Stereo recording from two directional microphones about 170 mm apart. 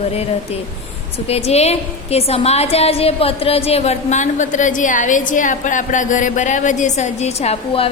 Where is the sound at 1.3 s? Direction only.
40° left (ahead or behind).